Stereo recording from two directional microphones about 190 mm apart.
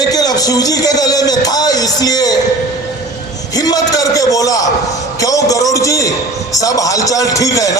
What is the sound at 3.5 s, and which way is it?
A man's voice, 20° left (ahead or behind).